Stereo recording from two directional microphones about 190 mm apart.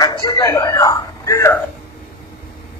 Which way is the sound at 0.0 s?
20° left (ahead or behind).